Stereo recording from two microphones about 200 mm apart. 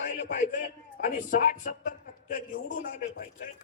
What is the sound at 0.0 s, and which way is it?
A man's voice, 50° left (ahead or behind).